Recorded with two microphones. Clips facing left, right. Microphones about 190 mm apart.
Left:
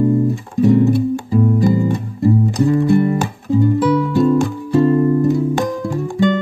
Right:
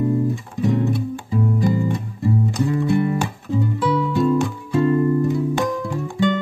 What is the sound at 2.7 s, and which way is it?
Music, 40° left (ahead or behind).